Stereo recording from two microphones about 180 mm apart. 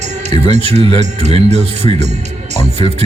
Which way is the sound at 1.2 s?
35° right (ahead or behind).